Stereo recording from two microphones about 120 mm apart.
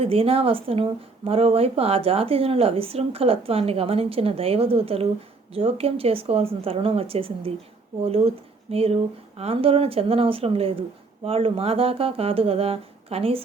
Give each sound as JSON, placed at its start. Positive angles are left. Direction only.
{"t": 0.0, "sound": "a woman's voice", "side_deg": -55}